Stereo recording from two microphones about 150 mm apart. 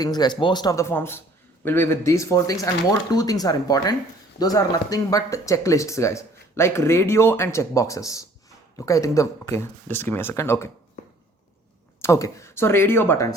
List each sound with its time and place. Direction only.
0.0 s speech: 25° left (ahead or behind)
12.0 s speech: 20° left (ahead or behind)